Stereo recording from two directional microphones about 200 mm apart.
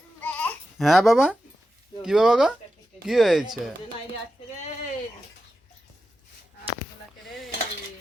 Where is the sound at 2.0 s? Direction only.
5° right (ahead or behind).